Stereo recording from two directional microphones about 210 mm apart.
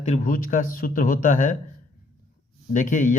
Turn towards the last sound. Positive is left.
turn(degrees=35)  # may be behind; listen again after turning